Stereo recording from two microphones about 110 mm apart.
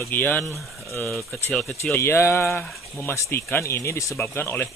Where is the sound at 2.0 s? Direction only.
25° left (ahead or behind).